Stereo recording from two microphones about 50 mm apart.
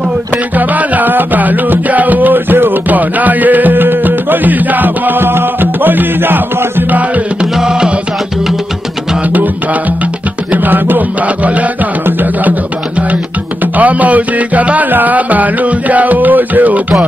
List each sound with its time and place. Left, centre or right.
0.6 s music: right
7.5 s music: centre
10.5 s music: right
13.7 s music: right